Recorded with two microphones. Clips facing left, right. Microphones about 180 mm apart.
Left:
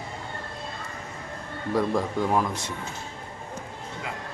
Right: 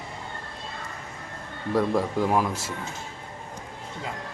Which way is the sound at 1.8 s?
5° right (ahead or behind).